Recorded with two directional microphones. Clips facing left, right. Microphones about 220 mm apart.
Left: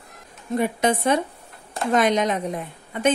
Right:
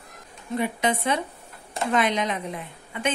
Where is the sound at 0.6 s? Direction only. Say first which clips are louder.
Left 4 dB; 45° left (ahead or behind).